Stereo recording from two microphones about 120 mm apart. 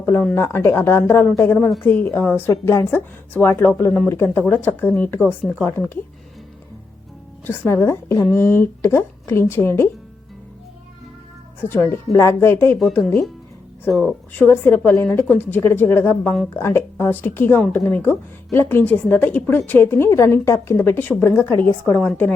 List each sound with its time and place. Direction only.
0.0 s a woman's voice: 10° left (ahead or behind)
0.3 s a woman's voice: 20° left (ahead or behind)
7.4 s speech: 15° left (ahead or behind)
11.6 s a woman's voice: 15° left (ahead or behind)
13.0 s speech: centre (ahead or behind)
14.3 s a woman's voice: 15° left (ahead or behind)